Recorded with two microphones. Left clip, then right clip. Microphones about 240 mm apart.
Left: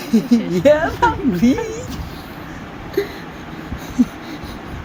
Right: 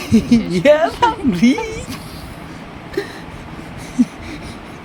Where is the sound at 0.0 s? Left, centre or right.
Right.